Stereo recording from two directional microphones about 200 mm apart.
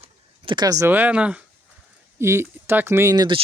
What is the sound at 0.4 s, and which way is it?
Speech, 20° right (ahead or behind).